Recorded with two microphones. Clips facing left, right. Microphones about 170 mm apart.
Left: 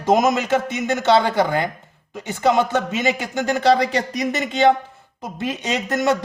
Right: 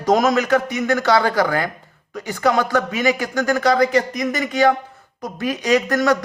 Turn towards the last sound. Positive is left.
turn(degrees=25)  # may be behind; listen again after turning